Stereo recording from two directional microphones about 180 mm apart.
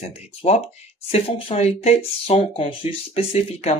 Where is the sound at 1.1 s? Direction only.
35° left (ahead or behind).